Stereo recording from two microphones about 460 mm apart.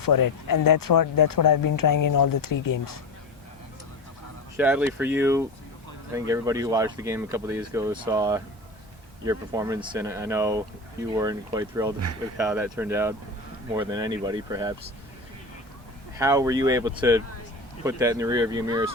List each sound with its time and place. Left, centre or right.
0.0 s speech: left
4.5 s speech: centre
16.1 s speech: centre